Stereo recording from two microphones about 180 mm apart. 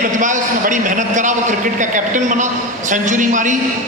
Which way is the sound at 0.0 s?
45° right (ahead or behind).